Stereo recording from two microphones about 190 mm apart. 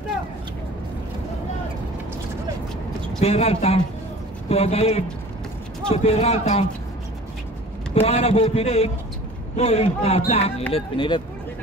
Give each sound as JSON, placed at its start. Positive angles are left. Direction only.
{"t": 3.2, "sound": "a man's voice", "side_deg": 30}
{"t": 7.9, "sound": "a man's voice", "side_deg": 30}